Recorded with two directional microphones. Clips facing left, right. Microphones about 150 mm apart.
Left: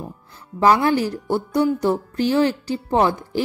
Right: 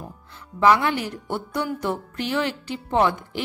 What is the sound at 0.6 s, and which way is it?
Speech, 35° left (ahead or behind).